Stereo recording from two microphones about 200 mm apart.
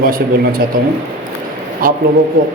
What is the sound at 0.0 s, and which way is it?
Speech, 45° right (ahead or behind).